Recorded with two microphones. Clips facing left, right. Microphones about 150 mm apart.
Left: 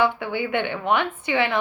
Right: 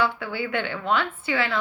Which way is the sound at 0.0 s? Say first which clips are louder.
Left 3 dB; 20° left (ahead or behind).